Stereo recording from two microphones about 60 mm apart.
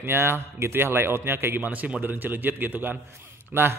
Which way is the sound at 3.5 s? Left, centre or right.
Right.